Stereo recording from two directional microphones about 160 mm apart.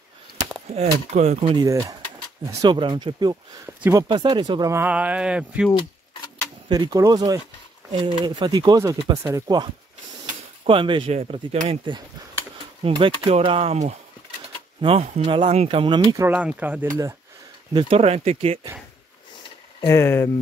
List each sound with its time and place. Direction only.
0.7 s speech: 40° right (ahead or behind)
1.4 s speech: 30° right (ahead or behind)
1.7 s speech: 20° right (ahead or behind)
3.6 s speech: 15° right (ahead or behind)
4.1 s speech: 30° right (ahead or behind); by 5.7 s 5° right (ahead or behind)
6.7 s speech: 25° right (ahead or behind)
10.7 s speech: 30° right (ahead or behind)
16.3 s speech: 10° right (ahead or behind)
17.7 s speech: 35° right (ahead or behind)
19.9 s speech: 15° left (ahead or behind)